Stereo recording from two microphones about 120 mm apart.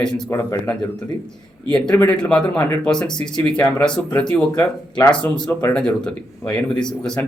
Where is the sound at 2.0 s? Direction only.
10° left (ahead or behind).